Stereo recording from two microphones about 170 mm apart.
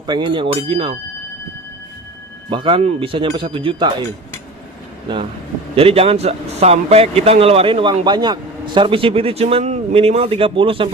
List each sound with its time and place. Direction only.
0.1 s speech: 25° right (ahead or behind)
2.5 s speech: 30° right (ahead or behind)
5.7 s speech: 35° right (ahead or behind)